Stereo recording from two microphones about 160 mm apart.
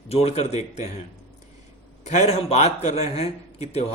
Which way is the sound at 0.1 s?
40° left (ahead or behind).